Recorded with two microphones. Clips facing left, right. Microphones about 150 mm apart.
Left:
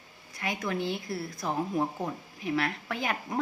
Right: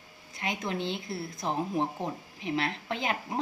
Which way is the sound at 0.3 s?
25° right (ahead or behind).